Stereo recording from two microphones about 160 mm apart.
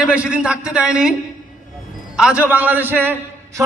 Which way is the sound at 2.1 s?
5° right (ahead or behind).